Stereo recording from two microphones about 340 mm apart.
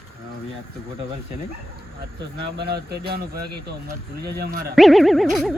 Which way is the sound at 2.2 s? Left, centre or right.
Right.